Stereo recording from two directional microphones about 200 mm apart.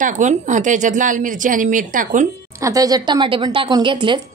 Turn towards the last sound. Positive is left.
turn(degrees=-25)  # may be behind; listen again after turning